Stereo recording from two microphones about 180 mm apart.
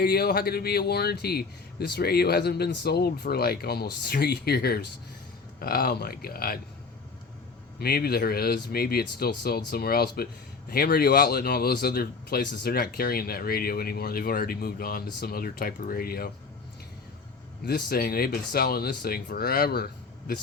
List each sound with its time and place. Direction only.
0.0 s speech: 60° left (ahead or behind)
7.8 s speech: 60° left (ahead or behind)
17.7 s speech: 60° left (ahead or behind)